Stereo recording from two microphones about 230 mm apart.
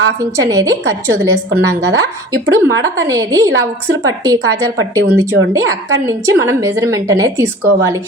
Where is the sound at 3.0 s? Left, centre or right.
Centre.